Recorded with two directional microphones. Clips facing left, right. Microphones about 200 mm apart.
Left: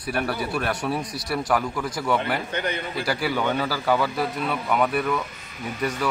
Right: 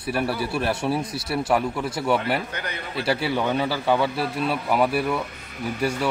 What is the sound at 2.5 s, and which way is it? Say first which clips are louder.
Speech: left 5 dB; 25° left (ahead or behind).